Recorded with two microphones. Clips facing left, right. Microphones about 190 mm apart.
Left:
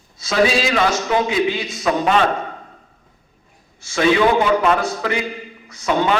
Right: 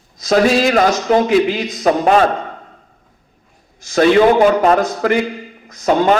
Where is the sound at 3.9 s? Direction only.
45° right (ahead or behind).